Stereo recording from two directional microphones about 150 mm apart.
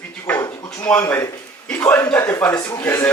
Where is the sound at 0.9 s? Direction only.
15° left (ahead or behind).